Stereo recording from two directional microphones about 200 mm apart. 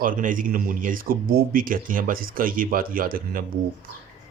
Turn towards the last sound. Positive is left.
turn(degrees=-45)  # may be behind; listen again after turning